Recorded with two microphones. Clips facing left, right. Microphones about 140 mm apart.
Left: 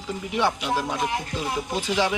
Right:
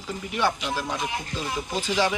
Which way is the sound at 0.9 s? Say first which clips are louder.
Left 3 dB; 10° left (ahead or behind).